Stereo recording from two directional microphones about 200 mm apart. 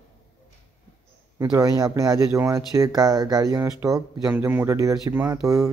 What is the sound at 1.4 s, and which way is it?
Speech, 15° right (ahead or behind).